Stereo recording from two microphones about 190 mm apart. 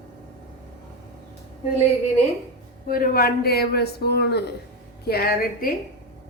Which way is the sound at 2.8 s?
50° left (ahead or behind).